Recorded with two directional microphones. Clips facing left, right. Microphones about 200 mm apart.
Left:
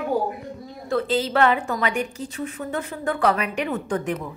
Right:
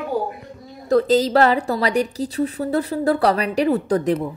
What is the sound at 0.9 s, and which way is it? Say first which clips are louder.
A woman's voice: right 7 dB; 40° right (ahead or behind).